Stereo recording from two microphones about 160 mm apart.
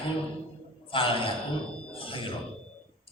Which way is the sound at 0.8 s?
35° left (ahead or behind).